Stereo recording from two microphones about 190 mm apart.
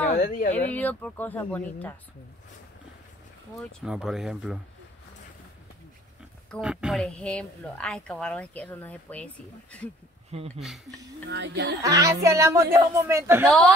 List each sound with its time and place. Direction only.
0.1 s speech: 40° left (ahead or behind)
0.7 s speech: 10° left (ahead or behind)
3.8 s a woman's voice: 5° right (ahead or behind)
6.5 s a woman's voice: 5° right (ahead or behind)
10.3 s speech: 30° right (ahead or behind)
11.2 s speech: 65° right (ahead or behind)
11.8 s speech: 15° right (ahead or behind)